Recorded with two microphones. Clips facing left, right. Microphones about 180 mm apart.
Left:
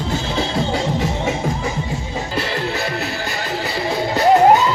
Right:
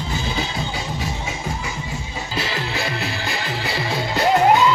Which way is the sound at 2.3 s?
60° left (ahead or behind).